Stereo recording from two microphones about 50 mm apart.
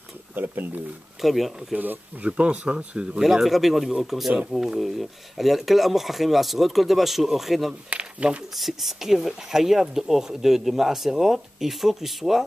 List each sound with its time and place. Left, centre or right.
0.3 s speech: right
1.2 s speech: centre
2.2 s speech: right
3.2 s speech: centre
4.3 s speech: centre
4.6 s speech: centre
7.9 s speech: right
8.5 s speech: centre